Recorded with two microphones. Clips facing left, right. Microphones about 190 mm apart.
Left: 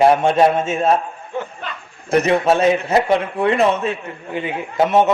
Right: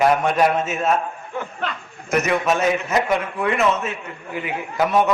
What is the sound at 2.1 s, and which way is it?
A man's voice, 30° left (ahead or behind).